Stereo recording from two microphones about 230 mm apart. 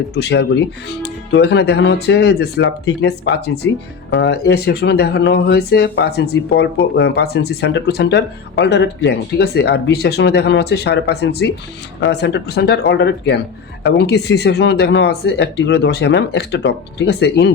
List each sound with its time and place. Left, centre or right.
0.1 s speech: left